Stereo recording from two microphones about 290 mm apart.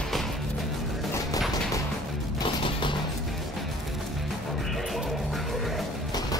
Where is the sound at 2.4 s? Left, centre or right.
Centre.